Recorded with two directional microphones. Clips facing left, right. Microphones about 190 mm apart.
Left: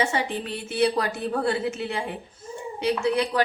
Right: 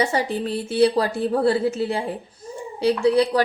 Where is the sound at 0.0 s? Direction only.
35° right (ahead or behind).